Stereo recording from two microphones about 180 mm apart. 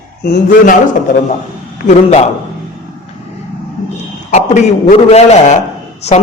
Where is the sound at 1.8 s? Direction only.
40° left (ahead or behind).